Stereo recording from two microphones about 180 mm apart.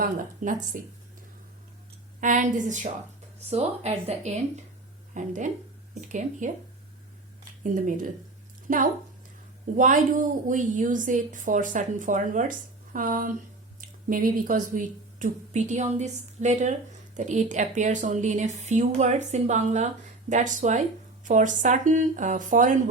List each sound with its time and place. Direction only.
0.0 s a woman's voice: 50° right (ahead or behind)
2.2 s a woman's voice: 45° right (ahead or behind)
7.6 s a woman's voice: 50° right (ahead or behind)